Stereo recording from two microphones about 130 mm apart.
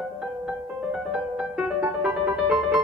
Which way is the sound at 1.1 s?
5° right (ahead or behind).